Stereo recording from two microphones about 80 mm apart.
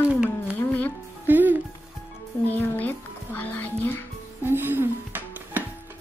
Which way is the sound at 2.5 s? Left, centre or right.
Left.